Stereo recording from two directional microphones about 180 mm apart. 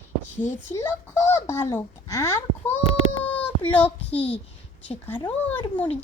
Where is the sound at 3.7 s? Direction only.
10° left (ahead or behind).